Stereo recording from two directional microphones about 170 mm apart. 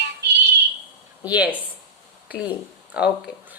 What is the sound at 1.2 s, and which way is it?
Speech, 10° right (ahead or behind).